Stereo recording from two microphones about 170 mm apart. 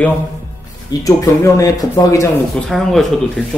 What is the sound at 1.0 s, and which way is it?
Speech, 20° left (ahead or behind).